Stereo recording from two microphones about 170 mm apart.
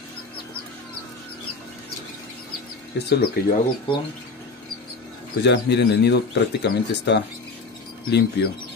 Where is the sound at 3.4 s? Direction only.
65° left (ahead or behind).